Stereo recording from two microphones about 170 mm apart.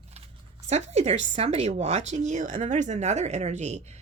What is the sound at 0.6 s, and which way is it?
Speech, 40° right (ahead or behind).